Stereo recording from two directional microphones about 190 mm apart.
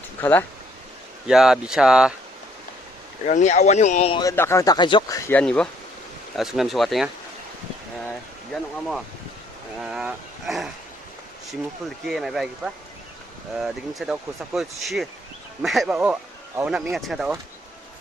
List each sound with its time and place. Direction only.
0.2 s speech: 10° left (ahead or behind)
1.3 s speech: centre (ahead or behind)
3.2 s speech: 40° left (ahead or behind)
4.2 s speech: 15° left (ahead or behind)
5.4 s speech: 5° left (ahead or behind)
8.5 s speech: centre (ahead or behind)
12.0 s speech: centre (ahead or behind)